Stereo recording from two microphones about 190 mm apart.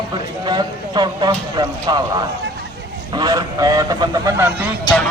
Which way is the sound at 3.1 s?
20° right (ahead or behind).